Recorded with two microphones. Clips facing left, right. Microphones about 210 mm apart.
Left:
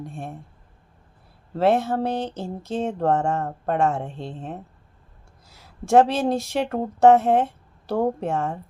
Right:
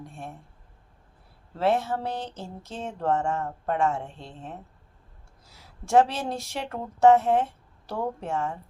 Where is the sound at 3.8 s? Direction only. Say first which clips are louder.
Left 3 dB; 60° left (ahead or behind).